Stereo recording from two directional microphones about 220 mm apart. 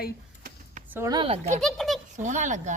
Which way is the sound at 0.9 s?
15° right (ahead or behind).